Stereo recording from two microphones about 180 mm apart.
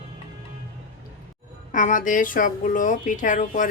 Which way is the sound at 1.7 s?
45° left (ahead or behind).